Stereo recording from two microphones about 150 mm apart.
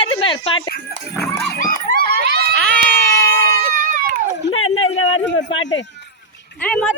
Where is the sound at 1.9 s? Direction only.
90° right.